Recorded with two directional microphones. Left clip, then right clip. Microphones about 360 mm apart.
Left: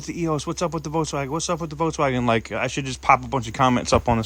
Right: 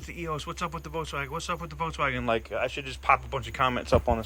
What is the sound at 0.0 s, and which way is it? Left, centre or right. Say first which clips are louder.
A man's voice: left 8 dB; centre.